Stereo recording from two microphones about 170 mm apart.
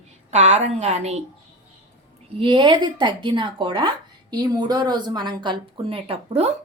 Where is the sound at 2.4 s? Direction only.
25° right (ahead or behind).